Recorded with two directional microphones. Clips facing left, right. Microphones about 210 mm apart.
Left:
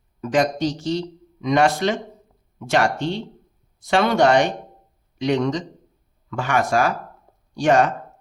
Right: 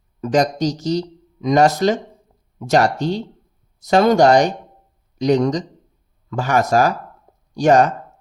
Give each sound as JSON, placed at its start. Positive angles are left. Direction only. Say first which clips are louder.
{"t": 0.2, "sound": "speech", "louder": "right 2 dB", "side_deg": -40}